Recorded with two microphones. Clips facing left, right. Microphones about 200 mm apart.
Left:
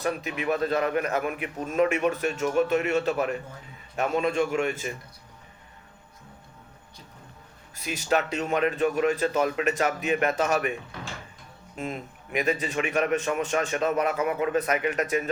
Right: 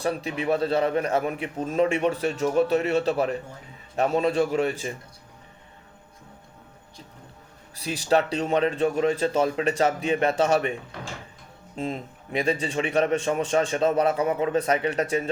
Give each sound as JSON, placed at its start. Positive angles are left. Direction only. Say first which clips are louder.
{"t": 0.0, "sound": "a man's voice", "louder": "right 2 dB", "side_deg": -30}
{"t": 7.8, "sound": "a man's voice", "louder": "right 3 dB", "side_deg": -35}
{"t": 11.8, "sound": "a man's voice", "louder": "right 3 dB", "side_deg": -30}